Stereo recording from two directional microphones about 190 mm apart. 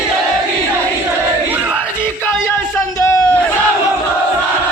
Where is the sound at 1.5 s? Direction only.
5° right (ahead or behind).